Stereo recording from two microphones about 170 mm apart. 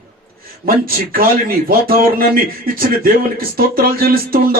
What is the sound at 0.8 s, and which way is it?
Speech, 60° right (ahead or behind).